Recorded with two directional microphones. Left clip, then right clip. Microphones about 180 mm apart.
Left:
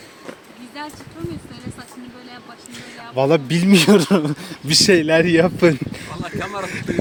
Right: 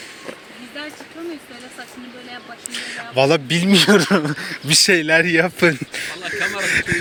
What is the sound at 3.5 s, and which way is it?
Speech, 30° left (ahead or behind).